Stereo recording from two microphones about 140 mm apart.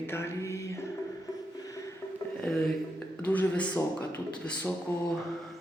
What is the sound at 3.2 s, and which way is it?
A man's voice, 10° left (ahead or behind).